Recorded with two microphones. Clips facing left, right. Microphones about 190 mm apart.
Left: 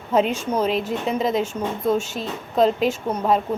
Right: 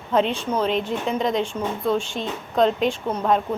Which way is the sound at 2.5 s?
5° left (ahead or behind).